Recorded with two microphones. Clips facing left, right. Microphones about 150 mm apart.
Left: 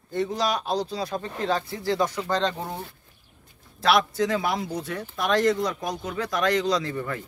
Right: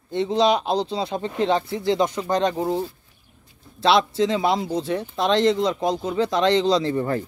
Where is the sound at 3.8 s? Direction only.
25° right (ahead or behind).